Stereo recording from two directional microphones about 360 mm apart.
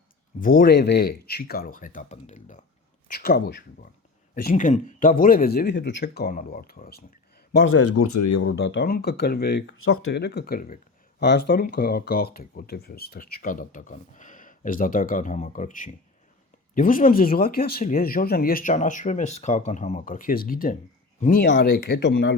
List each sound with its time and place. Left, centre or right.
0.3 s speech: left